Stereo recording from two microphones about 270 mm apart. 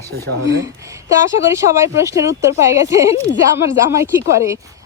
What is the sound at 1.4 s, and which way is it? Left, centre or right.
Speech, centre.